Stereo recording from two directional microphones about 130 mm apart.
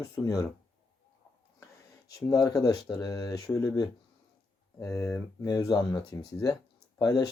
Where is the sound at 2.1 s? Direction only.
30° left (ahead or behind).